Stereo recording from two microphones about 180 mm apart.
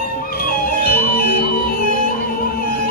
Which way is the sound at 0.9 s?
55° left (ahead or behind).